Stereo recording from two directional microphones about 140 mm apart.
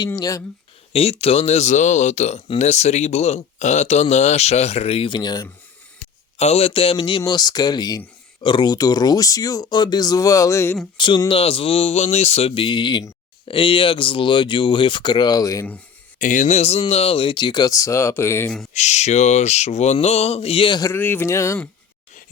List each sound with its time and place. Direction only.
0.2 s speech: 25° left (ahead or behind)
0.9 s speech: 45° left (ahead or behind); by 5.5 s 30° left (ahead or behind)
6.3 s speech: 50° left (ahead or behind); by 10.8 s 20° left (ahead or behind)
10.9 s speech: 35° left (ahead or behind)
16.1 s speech: 70° left (ahead or behind); by 18.5 s 20° left (ahead or behind)
18.7 s speech: 55° left (ahead or behind); by 20.8 s 40° left (ahead or behind)
20.8 s speech: 15° left (ahead or behind)